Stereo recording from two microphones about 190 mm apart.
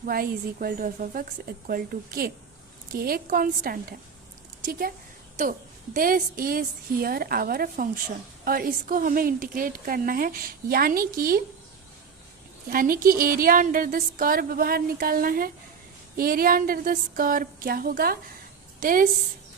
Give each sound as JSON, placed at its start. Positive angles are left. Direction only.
{"t": 0.0, "sound": "a woman's voice", "side_deg": -50}
{"t": 12.7, "sound": "a woman's voice", "side_deg": -50}